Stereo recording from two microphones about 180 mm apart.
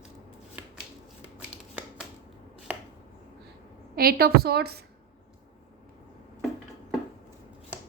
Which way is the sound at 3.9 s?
55° right (ahead or behind).